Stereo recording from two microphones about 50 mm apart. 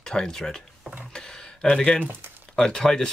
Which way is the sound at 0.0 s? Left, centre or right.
Centre.